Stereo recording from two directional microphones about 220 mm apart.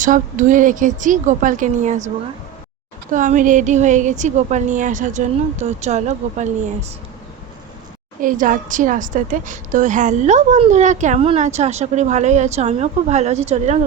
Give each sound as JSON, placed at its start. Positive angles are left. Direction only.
{"t": 0.0, "sound": "a woman's voice", "side_deg": -35}
{"t": 3.1, "sound": "a woman's voice", "side_deg": -35}
{"t": 8.2, "sound": "a woman's voice", "side_deg": -40}